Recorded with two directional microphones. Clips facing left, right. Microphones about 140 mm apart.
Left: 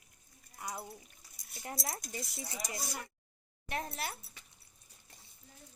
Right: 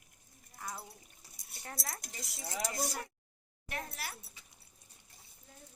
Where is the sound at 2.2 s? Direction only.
90° right.